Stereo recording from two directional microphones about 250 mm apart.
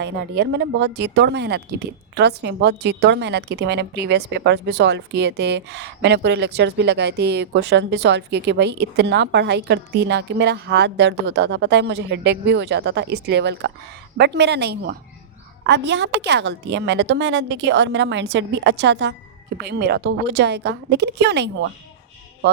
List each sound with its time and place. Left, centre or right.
0.0 s speech: right